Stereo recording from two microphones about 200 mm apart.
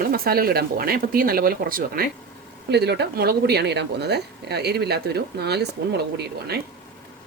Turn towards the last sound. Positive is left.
turn(degrees=-55)  # may be behind; listen again after turning